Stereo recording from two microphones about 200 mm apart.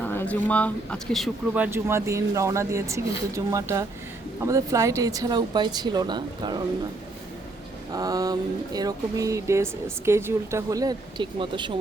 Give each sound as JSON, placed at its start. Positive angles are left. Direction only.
{"t": 0.0, "sound": "speech", "side_deg": 10}
{"t": 7.9, "sound": "speech", "side_deg": -20}